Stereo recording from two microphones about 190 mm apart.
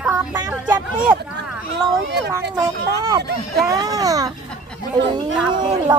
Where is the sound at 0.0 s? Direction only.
5° right (ahead or behind).